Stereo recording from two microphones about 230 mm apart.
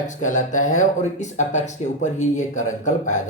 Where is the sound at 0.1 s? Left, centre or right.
Left.